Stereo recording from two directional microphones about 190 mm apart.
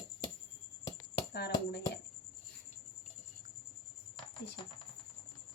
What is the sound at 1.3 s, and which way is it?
Speech, 60° left (ahead or behind).